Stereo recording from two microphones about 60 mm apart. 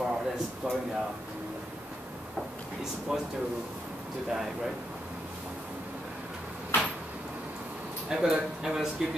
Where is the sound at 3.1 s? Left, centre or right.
Centre.